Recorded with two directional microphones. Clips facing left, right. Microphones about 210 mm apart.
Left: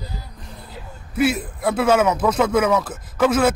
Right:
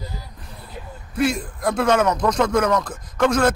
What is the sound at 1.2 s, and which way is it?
Speech, 5° left (ahead or behind).